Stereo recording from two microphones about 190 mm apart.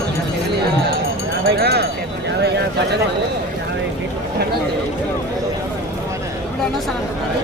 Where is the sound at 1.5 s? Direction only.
55° right (ahead or behind).